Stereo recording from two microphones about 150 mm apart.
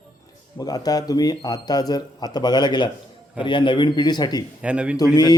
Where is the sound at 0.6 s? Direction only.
25° left (ahead or behind).